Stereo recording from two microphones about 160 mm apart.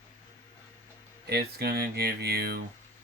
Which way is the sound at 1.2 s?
75° right (ahead or behind).